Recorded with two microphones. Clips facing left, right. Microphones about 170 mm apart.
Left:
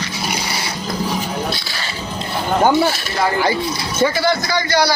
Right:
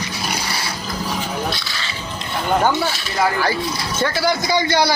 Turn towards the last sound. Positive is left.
turn(degrees=-20)  # may be behind; listen again after turning